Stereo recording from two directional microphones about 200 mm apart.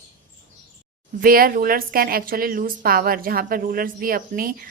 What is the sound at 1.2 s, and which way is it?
A woman's voice, 45° right (ahead or behind).